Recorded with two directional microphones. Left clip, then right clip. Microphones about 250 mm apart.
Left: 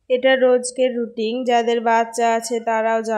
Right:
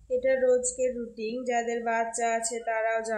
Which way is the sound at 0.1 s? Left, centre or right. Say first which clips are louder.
Left 9 dB; left.